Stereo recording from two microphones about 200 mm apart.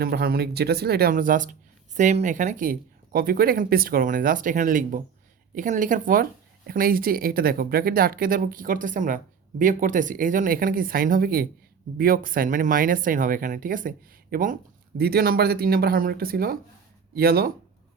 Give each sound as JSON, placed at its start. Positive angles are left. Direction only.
{"t": 0.0, "sound": "speech", "side_deg": -50}